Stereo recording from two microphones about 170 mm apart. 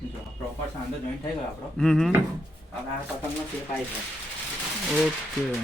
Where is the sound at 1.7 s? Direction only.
5° left (ahead or behind).